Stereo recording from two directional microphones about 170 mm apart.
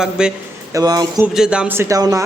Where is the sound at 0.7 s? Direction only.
20° right (ahead or behind).